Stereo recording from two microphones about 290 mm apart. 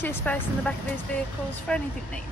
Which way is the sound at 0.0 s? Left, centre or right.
Centre.